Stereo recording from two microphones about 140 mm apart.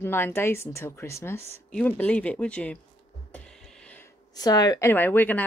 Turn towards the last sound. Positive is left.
turn(degrees=15)  # may be behind; listen again after turning